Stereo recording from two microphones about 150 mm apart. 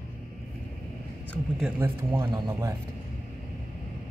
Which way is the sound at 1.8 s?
15° right (ahead or behind).